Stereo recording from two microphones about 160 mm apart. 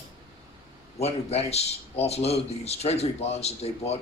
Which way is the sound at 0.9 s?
40° left (ahead or behind).